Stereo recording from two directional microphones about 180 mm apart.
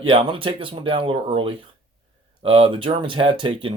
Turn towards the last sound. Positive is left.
turn(degrees=-30)  # may be behind; listen again after turning